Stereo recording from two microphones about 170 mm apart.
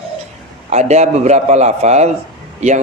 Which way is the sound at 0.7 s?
40° right (ahead or behind).